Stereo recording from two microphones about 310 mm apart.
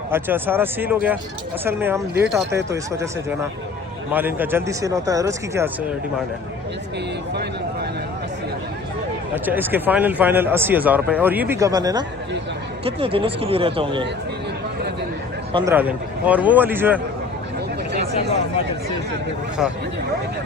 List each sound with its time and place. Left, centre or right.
0.1 s speech: centre
9.3 s speech: centre
15.5 s a man's voice: centre